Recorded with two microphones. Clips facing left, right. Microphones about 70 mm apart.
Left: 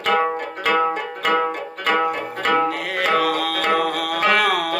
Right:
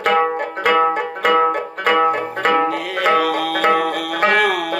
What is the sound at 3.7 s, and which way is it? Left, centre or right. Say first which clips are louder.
Music: right 2 dB; right.